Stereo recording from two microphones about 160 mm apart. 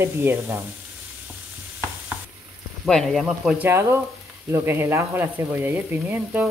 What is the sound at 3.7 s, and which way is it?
Speech, 15° right (ahead or behind).